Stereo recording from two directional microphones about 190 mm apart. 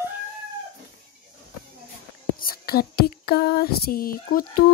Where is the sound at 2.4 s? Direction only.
50° left (ahead or behind).